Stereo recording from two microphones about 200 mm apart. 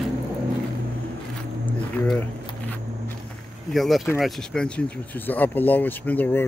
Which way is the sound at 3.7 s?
Centre (ahead or behind).